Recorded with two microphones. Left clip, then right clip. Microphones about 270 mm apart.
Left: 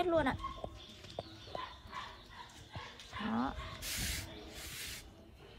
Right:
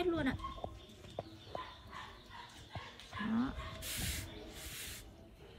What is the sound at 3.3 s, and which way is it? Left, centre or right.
Speech, centre.